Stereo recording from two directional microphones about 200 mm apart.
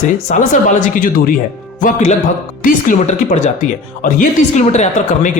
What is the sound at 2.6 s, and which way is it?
Speech, 40° left (ahead or behind).